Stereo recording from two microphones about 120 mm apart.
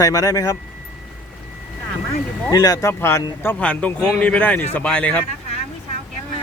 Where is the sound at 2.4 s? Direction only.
30° left (ahead or behind); by 5.2 s 10° left (ahead or behind).